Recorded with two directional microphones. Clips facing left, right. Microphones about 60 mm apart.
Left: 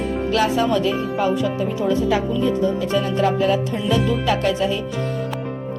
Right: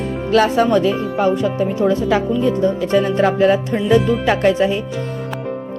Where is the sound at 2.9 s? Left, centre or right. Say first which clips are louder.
Right 6 dB; right.